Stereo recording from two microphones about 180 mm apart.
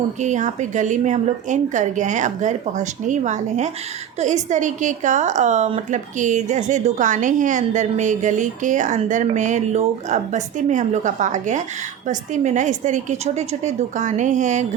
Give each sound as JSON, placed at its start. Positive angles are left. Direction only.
{"t": 0.2, "sound": "a woman's voice", "side_deg": -40}